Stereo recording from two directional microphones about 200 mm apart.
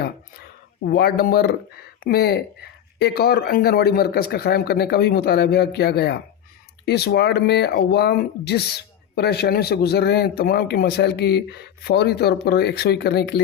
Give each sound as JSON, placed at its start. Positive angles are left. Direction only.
{"t": 0.9, "sound": "a man's voice", "side_deg": 50}